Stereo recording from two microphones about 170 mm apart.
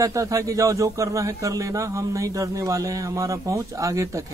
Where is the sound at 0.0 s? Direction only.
20° right (ahead or behind).